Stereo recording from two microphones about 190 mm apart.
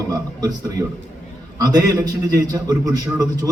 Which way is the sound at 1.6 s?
20° right (ahead or behind).